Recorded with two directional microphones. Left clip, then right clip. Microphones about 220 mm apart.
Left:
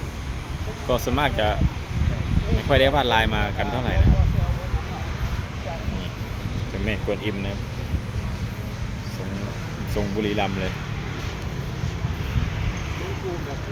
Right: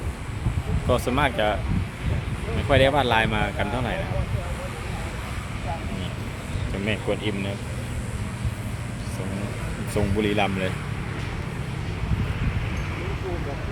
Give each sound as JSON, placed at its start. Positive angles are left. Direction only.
{"t": 0.9, "sound": "speech", "side_deg": -5}
{"t": 2.6, "sound": "speech", "side_deg": -5}
{"t": 6.8, "sound": "speech", "side_deg": -10}
{"t": 9.9, "sound": "speech", "side_deg": -15}